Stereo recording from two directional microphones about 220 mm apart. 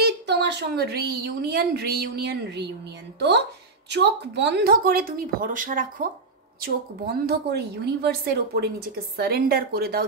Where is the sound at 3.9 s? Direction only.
50° right (ahead or behind).